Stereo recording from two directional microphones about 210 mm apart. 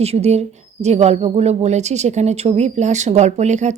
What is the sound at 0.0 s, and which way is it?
Speech, 30° right (ahead or behind).